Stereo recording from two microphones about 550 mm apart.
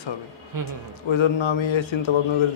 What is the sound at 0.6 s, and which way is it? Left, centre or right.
Speech, right.